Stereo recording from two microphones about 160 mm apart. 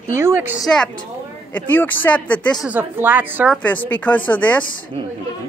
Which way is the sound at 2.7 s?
10° right (ahead or behind).